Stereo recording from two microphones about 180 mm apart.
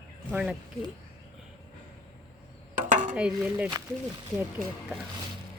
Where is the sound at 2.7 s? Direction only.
45° right (ahead or behind).